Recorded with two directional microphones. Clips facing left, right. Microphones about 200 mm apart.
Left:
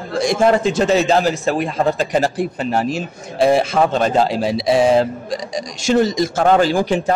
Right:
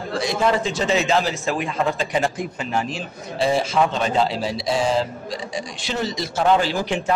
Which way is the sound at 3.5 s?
60° left (ahead or behind).